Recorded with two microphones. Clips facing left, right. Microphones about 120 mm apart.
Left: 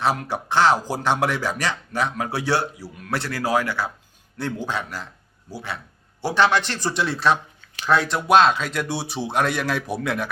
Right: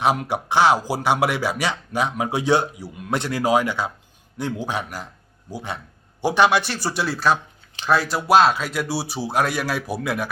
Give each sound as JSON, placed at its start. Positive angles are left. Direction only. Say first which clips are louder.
{"t": 0.0, "sound": "speech", "louder": "right 2 dB", "side_deg": -15}